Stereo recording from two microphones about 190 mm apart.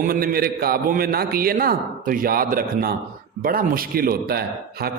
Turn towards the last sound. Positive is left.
turn(degrees=-55)  # may be behind; listen again after turning